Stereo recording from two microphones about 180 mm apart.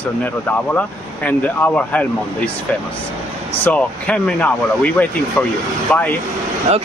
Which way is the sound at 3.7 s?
5° left (ahead or behind).